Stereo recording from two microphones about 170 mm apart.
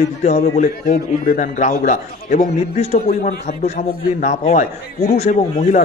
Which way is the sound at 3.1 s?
50° left (ahead or behind).